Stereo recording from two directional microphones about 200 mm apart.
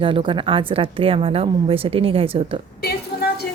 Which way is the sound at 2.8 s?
50° left (ahead or behind).